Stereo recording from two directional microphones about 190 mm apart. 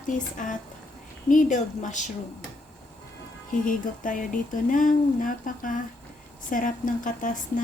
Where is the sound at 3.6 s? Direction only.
45° left (ahead or behind).